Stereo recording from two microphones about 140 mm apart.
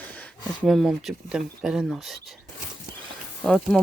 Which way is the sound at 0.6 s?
Centre (ahead or behind).